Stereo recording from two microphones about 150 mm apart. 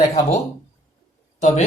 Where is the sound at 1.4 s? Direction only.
50° left (ahead or behind).